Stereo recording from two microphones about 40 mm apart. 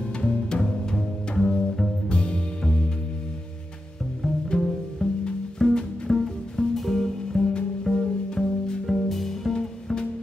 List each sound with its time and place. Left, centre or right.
0.2 s music: left
0.9 s double bass: centre
2.0 s music: left
4.6 s pizzicato: centre
5.6 s music: centre